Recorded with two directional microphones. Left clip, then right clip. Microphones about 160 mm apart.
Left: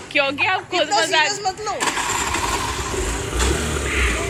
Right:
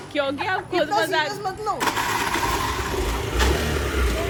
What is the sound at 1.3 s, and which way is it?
Speech, 90° right.